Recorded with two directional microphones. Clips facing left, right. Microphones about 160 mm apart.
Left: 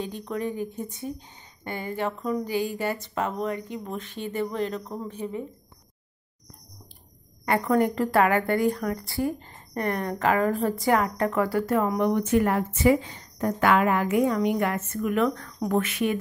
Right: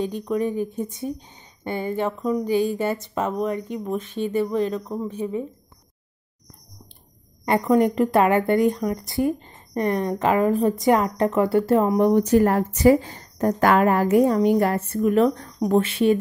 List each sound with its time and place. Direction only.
0.0 s speech: 15° right (ahead or behind)
7.4 s speech: 20° right (ahead or behind)